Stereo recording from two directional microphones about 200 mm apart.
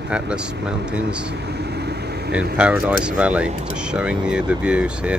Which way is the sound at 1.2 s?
55° right (ahead or behind).